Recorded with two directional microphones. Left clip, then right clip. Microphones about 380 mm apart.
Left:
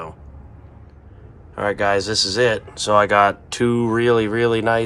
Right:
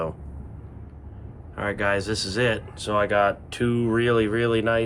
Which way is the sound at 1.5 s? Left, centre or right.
Centre.